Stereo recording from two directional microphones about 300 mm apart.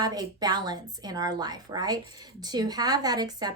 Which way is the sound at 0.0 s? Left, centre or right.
Centre.